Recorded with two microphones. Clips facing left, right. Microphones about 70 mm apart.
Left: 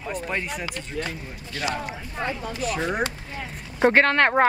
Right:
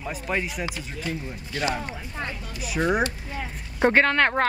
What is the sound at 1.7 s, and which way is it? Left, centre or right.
Speech, centre.